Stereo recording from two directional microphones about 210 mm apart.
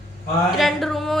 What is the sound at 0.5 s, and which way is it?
Speech, centre (ahead or behind).